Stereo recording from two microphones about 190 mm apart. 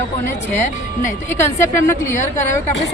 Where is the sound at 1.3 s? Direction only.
15° left (ahead or behind).